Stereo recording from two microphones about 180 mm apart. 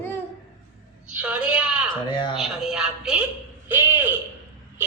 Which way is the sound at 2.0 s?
25° left (ahead or behind).